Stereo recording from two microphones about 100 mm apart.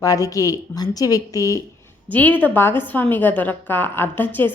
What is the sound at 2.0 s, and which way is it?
A woman's voice, 15° left (ahead or behind).